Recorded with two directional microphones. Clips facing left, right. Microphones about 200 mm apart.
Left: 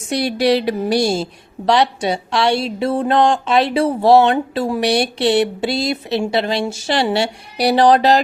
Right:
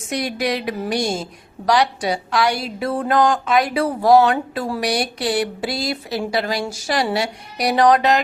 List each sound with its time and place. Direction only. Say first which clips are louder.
0.1 s a woman's voice: left 6 dB; 30° left (ahead or behind)